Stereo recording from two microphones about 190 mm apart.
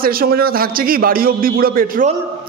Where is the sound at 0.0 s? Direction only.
50° right (ahead or behind).